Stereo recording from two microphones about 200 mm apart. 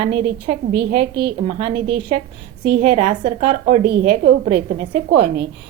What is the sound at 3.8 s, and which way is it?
Speech, 45° right (ahead or behind).